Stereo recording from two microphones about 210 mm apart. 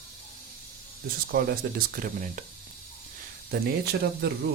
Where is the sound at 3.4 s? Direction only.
50° right (ahead or behind).